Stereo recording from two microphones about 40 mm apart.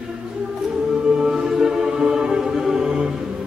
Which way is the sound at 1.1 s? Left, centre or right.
Centre.